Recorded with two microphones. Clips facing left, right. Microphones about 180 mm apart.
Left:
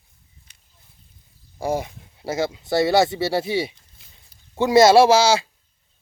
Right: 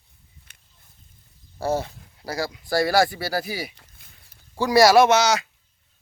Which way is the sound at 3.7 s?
65° right (ahead or behind).